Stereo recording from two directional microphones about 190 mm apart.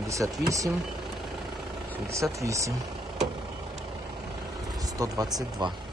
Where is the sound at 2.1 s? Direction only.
15° right (ahead or behind).